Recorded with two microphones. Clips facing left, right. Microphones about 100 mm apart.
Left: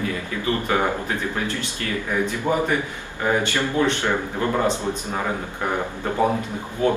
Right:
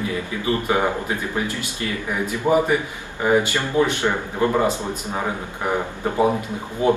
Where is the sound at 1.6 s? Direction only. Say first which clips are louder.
Even; 10° right (ahead or behind).